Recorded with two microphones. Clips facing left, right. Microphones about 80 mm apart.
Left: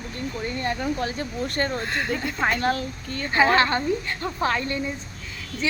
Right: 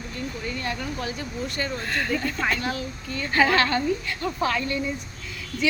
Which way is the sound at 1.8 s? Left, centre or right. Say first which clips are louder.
Even; left.